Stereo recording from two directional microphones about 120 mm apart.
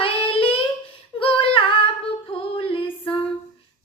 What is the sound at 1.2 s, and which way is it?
Female singing, 50° left (ahead or behind).